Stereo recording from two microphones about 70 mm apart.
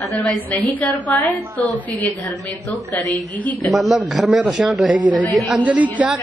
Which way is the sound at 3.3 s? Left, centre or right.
Left.